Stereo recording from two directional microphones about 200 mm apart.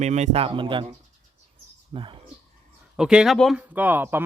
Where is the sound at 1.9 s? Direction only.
25° right (ahead or behind).